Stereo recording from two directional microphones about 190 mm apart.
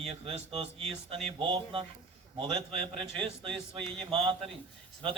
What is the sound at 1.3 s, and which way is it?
A man's voice, 25° right (ahead or behind).